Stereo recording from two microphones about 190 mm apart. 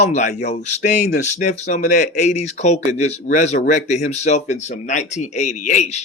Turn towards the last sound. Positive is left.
turn(degrees=40)  # may be behind; listen again after turning